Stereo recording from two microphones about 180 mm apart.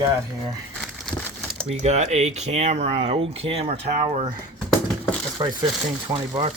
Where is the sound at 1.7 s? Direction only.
40° right (ahead or behind).